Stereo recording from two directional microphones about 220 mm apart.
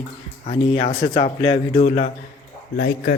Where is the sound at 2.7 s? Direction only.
45° left (ahead or behind).